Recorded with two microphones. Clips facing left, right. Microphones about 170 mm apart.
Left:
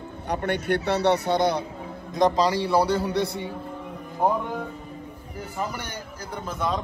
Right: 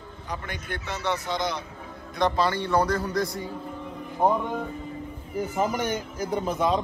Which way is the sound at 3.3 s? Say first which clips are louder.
Left 2 dB; 70° left (ahead or behind).